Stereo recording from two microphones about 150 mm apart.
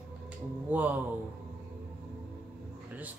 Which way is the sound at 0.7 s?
10° right (ahead or behind).